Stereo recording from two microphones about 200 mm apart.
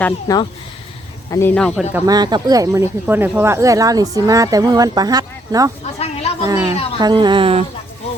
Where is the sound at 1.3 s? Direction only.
10° left (ahead or behind).